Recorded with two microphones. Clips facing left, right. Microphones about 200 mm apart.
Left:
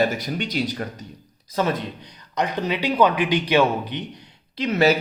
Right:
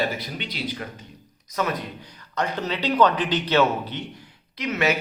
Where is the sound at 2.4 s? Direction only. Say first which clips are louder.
Left 3 dB; 15° left (ahead or behind).